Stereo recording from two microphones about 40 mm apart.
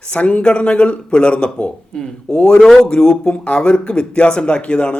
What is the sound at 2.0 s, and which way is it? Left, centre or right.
A man's voice, centre.